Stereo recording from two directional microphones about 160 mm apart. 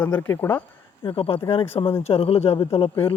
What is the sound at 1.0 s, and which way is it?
Speech, 35° left (ahead or behind).